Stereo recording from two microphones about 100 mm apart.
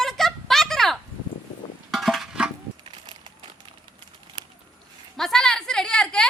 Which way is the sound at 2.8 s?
55° right (ahead or behind).